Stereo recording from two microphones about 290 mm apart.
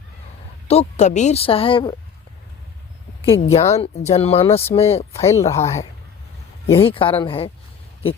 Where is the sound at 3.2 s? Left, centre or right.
Centre.